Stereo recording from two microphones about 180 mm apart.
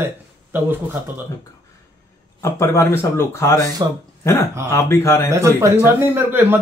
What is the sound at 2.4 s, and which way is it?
Speech, 15° left (ahead or behind).